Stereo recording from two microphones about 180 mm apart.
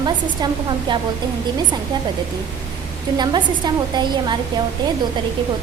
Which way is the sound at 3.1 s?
25° right (ahead or behind).